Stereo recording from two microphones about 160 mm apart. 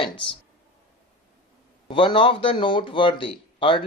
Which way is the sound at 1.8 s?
35° left (ahead or behind).